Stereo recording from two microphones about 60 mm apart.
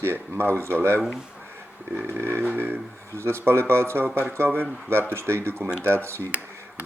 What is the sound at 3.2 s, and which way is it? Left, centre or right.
Speech, right.